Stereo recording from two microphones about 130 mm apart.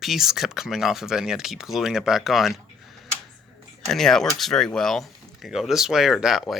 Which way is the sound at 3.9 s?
5° left (ahead or behind).